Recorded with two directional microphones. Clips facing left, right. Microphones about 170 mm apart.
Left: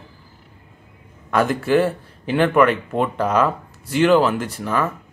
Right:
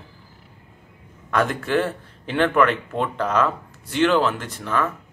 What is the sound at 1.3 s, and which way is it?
Speech, 5° left (ahead or behind).